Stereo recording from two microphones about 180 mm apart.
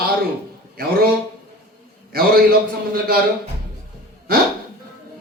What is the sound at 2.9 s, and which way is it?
Speech, 55° right (ahead or behind).